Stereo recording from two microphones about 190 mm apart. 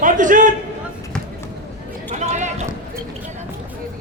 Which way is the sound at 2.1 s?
40° right (ahead or behind).